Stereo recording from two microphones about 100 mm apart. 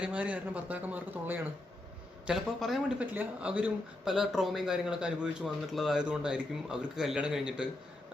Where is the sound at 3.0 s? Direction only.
15° right (ahead or behind).